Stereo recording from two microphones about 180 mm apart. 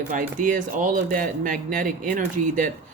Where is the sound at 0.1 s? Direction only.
45° right (ahead or behind).